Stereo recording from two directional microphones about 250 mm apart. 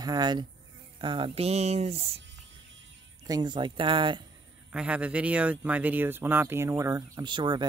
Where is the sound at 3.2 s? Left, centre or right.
Centre.